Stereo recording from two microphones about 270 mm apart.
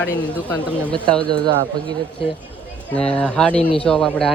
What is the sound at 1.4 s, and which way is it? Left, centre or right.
Speech, centre.